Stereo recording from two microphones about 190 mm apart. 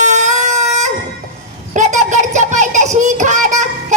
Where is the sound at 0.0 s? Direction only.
40° right (ahead or behind).